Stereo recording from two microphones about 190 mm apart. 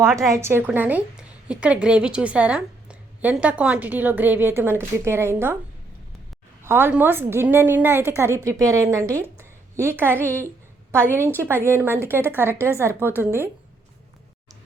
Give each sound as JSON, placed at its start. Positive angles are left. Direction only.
{"t": 0.2, "sound": "a woman's voice", "side_deg": -15}
{"t": 6.7, "sound": "a woman's voice", "side_deg": -10}